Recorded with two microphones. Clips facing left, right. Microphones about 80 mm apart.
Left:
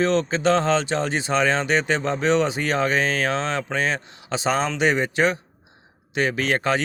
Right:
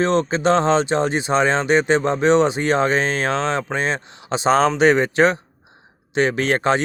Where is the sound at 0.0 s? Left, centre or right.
Right.